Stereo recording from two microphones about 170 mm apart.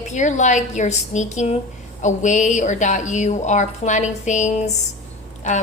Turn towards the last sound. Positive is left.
turn(degrees=45)  # may be behind; listen again after turning